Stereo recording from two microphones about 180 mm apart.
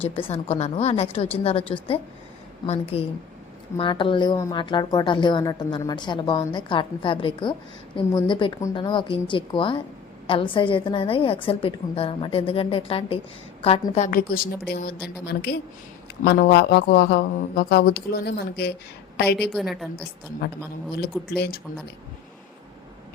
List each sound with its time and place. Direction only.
0.2 s a woman's voice: 30° left (ahead or behind)
14.1 s a woman's voice: 55° left (ahead or behind)
19.4 s a woman's voice: centre (ahead or behind)
21.3 s speech: 65° left (ahead or behind)